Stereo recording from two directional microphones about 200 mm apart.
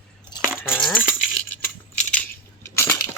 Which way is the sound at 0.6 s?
10° left (ahead or behind).